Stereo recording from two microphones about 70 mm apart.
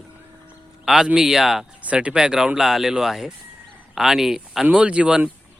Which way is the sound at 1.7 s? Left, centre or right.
Centre.